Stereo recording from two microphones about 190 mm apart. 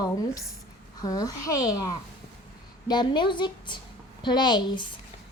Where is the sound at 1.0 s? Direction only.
20° left (ahead or behind).